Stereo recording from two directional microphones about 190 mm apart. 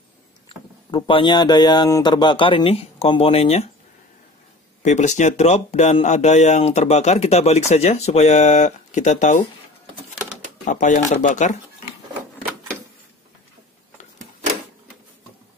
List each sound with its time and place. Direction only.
0.9 s speech: 25° left (ahead or behind)
4.8 s speech: 40° left (ahead or behind)
10.7 s speech: 45° left (ahead or behind)